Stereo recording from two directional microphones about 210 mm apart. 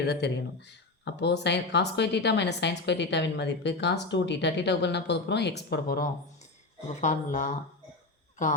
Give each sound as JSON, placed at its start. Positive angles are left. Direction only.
{"t": 0.0, "sound": "speech", "side_deg": 50}
{"t": 7.0, "sound": "speech", "side_deg": 35}